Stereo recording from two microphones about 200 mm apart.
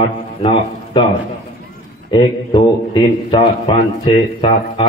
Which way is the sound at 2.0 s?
25° left (ahead or behind).